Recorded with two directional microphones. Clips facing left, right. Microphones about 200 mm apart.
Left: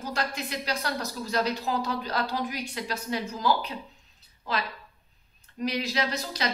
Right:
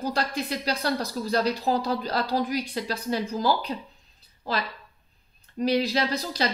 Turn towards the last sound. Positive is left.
turn(degrees=-35)  # may be behind; listen again after turning